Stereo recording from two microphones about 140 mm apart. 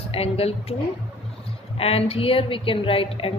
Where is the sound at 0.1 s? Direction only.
45° left (ahead or behind).